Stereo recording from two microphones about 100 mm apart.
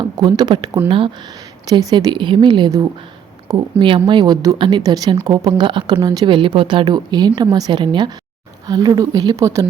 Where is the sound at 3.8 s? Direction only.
50° right (ahead or behind).